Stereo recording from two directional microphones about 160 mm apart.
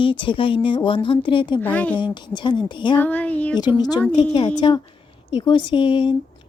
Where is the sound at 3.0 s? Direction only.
10° left (ahead or behind).